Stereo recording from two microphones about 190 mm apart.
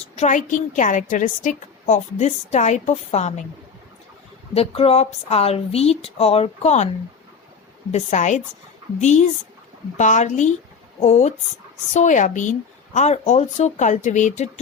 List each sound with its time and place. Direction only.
0.2 s a woman's voice: 40° left (ahead or behind)
4.5 s a woman's voice: 30° left (ahead or behind)
7.9 s a woman's voice: 40° left (ahead or behind)